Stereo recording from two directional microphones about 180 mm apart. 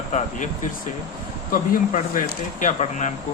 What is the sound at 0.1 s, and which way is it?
Speech, 45° left (ahead or behind).